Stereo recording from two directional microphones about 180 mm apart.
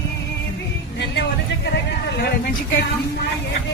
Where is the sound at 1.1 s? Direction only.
70° left (ahead or behind).